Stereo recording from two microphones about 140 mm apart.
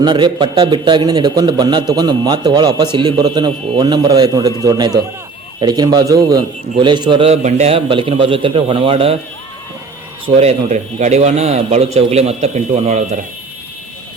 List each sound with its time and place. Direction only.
0.0 s a man's voice: 35° right (ahead or behind)
7.3 s a man's voice: 50° right (ahead or behind)
10.3 s a man's voice: 55° right (ahead or behind)